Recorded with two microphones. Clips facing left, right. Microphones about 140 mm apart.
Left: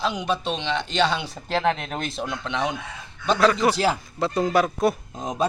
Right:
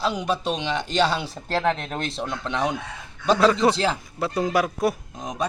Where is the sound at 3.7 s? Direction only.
10° left (ahead or behind).